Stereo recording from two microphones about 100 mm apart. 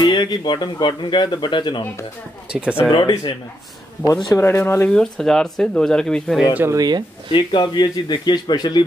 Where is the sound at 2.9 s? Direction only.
50° left (ahead or behind).